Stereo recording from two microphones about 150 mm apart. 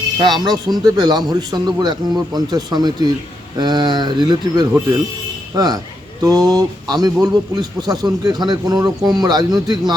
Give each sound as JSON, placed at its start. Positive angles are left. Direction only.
{"t": 0.3, "sound": "speech", "side_deg": 0}
{"t": 0.5, "sound": "a man's voice", "side_deg": -25}